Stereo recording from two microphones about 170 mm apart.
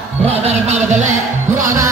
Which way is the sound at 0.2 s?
40° right (ahead or behind).